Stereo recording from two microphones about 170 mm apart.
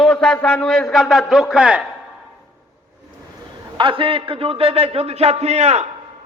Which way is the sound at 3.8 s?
30° right (ahead or behind).